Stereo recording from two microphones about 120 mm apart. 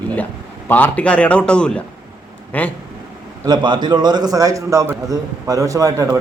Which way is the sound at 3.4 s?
40° right (ahead or behind).